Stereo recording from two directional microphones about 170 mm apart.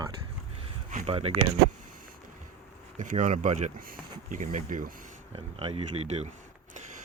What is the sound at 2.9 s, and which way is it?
Speech, 45° right (ahead or behind).